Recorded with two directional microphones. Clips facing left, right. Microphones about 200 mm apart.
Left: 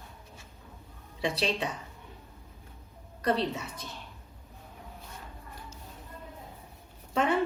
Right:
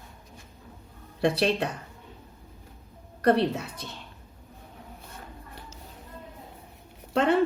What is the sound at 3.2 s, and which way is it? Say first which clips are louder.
Speech: right 6 dB; 60° right (ahead or behind).